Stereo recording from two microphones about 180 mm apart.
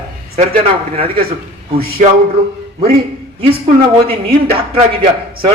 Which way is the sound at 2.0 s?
45° right (ahead or behind).